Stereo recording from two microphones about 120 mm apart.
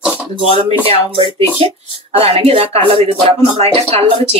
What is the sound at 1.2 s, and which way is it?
Speech, 50° right (ahead or behind).